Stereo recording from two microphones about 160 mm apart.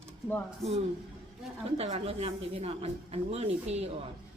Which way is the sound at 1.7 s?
40° right (ahead or behind).